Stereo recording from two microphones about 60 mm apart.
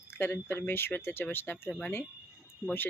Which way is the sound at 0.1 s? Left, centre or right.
Left.